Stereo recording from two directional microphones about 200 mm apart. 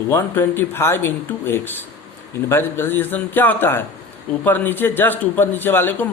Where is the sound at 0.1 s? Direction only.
10° left (ahead or behind).